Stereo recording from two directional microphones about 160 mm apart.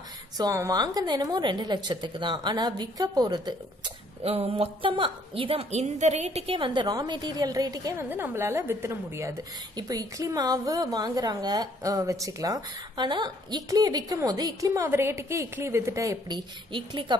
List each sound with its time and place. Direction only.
0.4 s a woman's voice: 20° right (ahead or behind)